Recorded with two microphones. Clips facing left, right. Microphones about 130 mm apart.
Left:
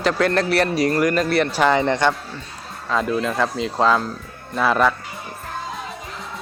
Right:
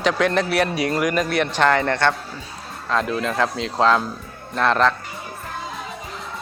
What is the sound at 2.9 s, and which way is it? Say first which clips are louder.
Speech: left 1 dB; 5° left (ahead or behind).